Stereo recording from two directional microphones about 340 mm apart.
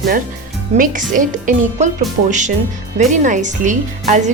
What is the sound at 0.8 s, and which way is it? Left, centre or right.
A woman's voice, right.